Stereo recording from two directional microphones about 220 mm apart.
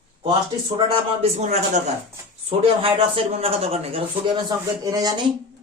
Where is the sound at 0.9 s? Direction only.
30° right (ahead or behind).